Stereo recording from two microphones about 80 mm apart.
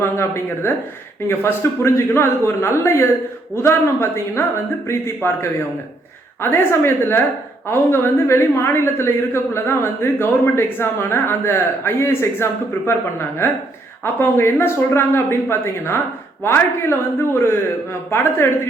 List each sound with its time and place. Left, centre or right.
0.0 s a woman's voice: left